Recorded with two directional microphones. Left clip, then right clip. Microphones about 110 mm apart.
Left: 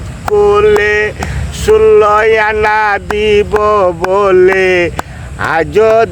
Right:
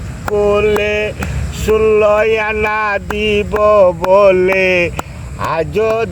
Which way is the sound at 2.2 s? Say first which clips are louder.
Left 5 dB; 40° left (ahead or behind).